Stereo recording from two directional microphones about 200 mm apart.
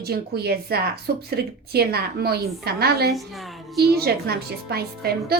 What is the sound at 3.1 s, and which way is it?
Speech, centre (ahead or behind).